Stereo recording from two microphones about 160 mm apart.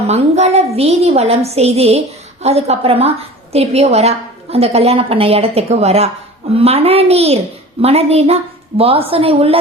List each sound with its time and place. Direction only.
0.1 s a woman's voice: 45° right (ahead or behind)